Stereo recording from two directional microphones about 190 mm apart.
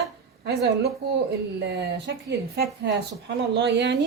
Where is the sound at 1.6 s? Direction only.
60° right (ahead or behind).